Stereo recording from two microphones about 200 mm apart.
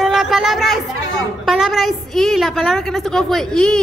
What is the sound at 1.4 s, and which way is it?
A woman's voice, centre (ahead or behind).